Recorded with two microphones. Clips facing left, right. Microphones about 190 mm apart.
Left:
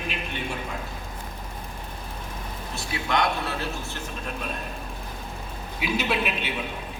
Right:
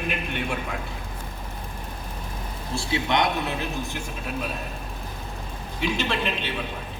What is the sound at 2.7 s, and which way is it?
Speech, 25° right (ahead or behind).